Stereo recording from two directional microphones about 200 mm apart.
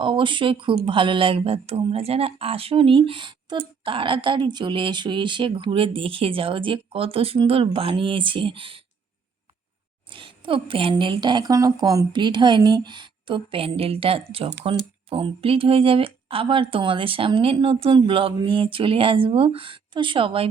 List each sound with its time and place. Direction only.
0.0 s speech: 25° right (ahead or behind)
10.1 s speech: 25° right (ahead or behind)